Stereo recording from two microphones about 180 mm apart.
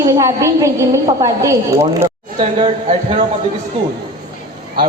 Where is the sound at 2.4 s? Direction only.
35° right (ahead or behind).